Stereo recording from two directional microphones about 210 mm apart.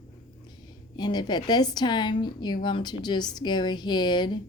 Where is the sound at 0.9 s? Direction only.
20° left (ahead or behind).